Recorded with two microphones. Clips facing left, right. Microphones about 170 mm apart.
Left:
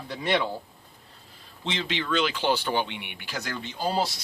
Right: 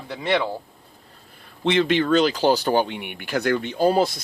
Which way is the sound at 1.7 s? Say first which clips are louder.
Right 11 dB; 60° right (ahead or behind).